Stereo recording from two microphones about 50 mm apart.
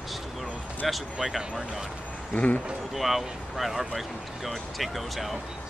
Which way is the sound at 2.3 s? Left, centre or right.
Left.